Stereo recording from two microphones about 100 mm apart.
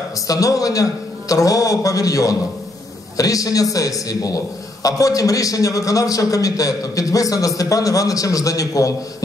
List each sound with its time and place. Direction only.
0.3 s a man's voice: 35° left (ahead or behind)